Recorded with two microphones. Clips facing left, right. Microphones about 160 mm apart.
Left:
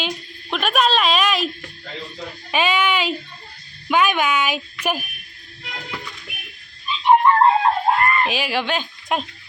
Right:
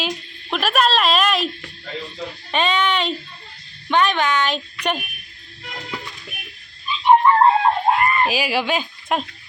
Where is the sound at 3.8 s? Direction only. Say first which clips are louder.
Even; 10° left (ahead or behind).